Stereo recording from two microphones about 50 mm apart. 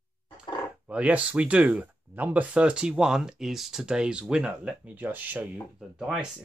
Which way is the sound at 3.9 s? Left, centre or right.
Centre.